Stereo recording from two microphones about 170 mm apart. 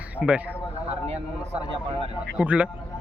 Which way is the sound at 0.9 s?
40° right (ahead or behind).